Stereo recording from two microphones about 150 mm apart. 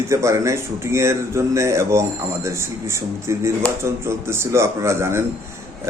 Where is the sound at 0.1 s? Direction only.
20° right (ahead or behind).